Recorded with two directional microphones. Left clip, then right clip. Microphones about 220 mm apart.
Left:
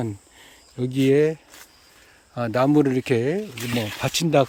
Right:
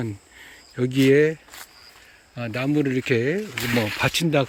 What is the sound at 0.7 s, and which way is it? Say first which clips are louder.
Speech: right 2 dB; centre (ahead or behind).